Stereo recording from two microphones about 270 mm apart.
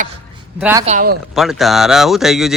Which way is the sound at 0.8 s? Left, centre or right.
Right.